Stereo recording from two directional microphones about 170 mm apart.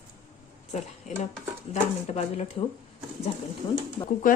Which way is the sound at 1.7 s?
40° left (ahead or behind).